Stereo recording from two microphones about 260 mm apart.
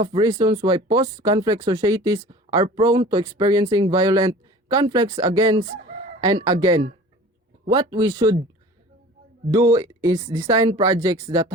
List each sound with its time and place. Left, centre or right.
0.0 s speech: centre
9.5 s speech: centre